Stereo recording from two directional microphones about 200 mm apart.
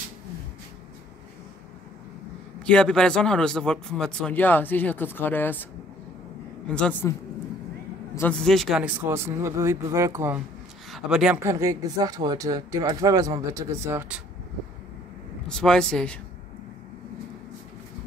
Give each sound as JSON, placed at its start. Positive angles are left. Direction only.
{"t": 2.6, "sound": "speech", "side_deg": 5}
{"t": 6.7, "sound": "a woman's voice", "side_deg": 5}
{"t": 15.4, "sound": "speech", "side_deg": 5}